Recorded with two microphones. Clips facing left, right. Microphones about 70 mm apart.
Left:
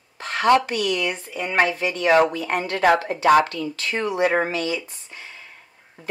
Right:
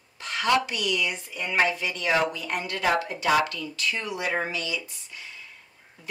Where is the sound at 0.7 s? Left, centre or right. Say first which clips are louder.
Left 5 dB; left.